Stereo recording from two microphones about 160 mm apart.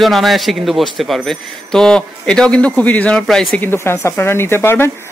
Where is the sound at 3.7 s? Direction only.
15° left (ahead or behind).